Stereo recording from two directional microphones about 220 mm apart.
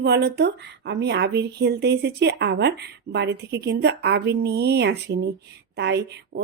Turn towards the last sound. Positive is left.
turn(degrees=-50)  # may be behind; listen again after turning